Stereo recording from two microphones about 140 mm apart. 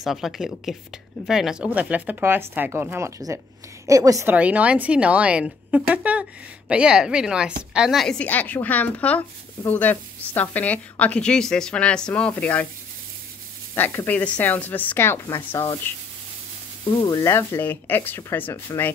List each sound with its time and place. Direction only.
0.0 s a woman's voice: centre (ahead or behind); by 4.4 s 20° right (ahead or behind)
4.4 s a woman's voice: 10° right (ahead or behind); by 12.6 s 10° left (ahead or behind)
13.7 s a woman's voice: 15° left (ahead or behind)
16.9 s a woman's voice: 30° left (ahead or behind)